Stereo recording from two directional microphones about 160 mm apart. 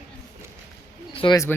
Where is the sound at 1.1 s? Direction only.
30° left (ahead or behind).